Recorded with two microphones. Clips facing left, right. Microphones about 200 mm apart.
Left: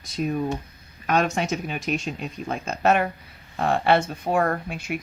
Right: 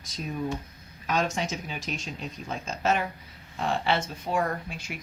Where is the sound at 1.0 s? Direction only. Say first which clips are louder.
Left 5 dB; 65° left (ahead or behind).